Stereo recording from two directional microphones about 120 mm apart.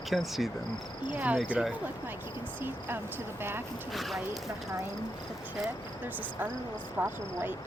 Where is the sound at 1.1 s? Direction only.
10° right (ahead or behind).